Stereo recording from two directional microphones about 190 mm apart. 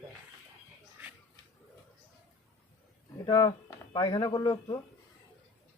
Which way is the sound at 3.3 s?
20° left (ahead or behind).